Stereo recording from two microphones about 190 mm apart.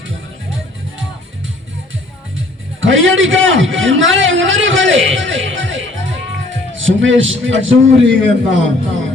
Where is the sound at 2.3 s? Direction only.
90° right.